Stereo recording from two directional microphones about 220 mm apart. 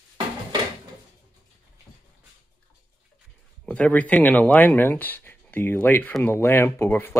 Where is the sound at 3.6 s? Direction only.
5° left (ahead or behind).